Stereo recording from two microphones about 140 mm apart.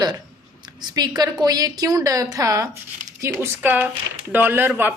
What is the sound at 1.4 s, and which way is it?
A woman's voice, 25° right (ahead or behind).